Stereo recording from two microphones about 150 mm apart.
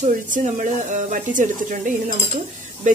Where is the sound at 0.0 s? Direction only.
60° right (ahead or behind).